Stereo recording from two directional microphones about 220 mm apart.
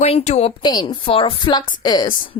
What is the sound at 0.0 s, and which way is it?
A woman's voice, 30° left (ahead or behind).